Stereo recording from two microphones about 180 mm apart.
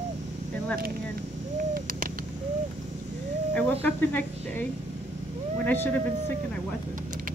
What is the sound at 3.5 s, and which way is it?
Speech, 10° left (ahead or behind).